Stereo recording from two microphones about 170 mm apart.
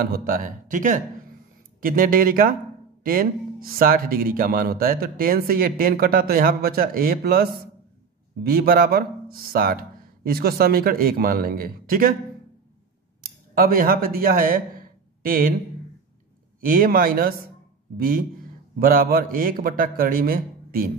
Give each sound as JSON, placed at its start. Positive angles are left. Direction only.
{"t": 0.0, "sound": "speech", "side_deg": -60}
{"t": 13.2, "sound": "speech", "side_deg": -60}
{"t": 16.6, "sound": "speech", "side_deg": -55}